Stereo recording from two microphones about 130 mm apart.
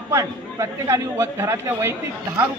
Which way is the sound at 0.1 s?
25° right (ahead or behind).